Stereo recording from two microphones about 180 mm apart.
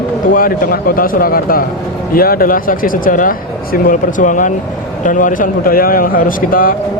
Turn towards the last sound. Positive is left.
turn(degrees=50)  # may be behind; listen again after turning